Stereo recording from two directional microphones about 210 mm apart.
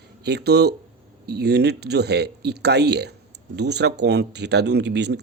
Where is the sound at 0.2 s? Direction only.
50° right (ahead or behind).